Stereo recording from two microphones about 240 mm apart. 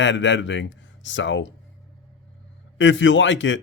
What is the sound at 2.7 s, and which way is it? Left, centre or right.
Speech, left.